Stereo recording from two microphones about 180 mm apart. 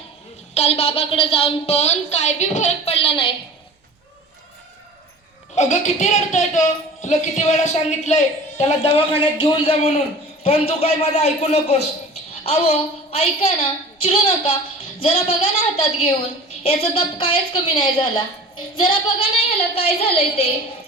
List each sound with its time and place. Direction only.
0.5 s a woman's voice: 35° left (ahead or behind)
5.5 s a woman's voice: 40° left (ahead or behind)